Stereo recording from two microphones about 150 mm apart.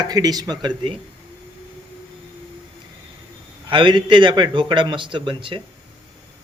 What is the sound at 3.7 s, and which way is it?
A man's voice, 30° right (ahead or behind).